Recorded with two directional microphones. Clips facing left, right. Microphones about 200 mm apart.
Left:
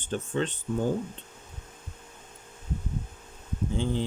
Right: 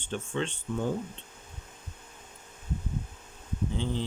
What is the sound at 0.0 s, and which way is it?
Speech, 40° left (ahead or behind).